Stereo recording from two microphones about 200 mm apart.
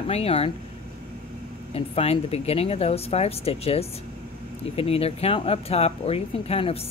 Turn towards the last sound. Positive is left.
turn(degrees=30)  # may be behind; listen again after turning